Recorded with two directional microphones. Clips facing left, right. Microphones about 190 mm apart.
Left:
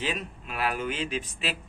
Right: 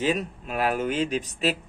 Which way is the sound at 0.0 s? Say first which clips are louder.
Right 7 dB; 45° right (ahead or behind).